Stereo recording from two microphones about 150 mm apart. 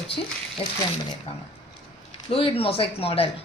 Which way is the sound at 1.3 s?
40° left (ahead or behind).